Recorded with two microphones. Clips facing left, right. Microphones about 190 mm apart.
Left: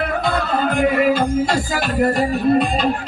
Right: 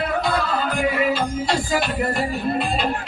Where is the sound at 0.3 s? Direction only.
50° left (ahead or behind).